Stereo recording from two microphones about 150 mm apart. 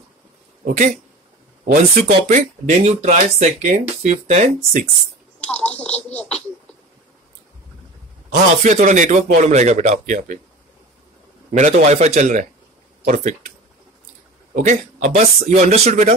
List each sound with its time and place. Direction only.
0.7 s a man's voice: 60° right (ahead or behind)
1.6 s speech: 75° right (ahead or behind)
2.0 s speech: 55° right (ahead or behind)
5.5 s speech: 10° left (ahead or behind)
6.1 s a sound: 10° left (ahead or behind)
8.6 s a man's voice: 55° right (ahead or behind)
11.5 s a man's voice: 50° right (ahead or behind)
14.6 s speech: 55° right (ahead or behind)